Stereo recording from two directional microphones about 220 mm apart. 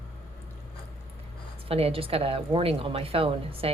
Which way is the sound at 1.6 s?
25° right (ahead or behind).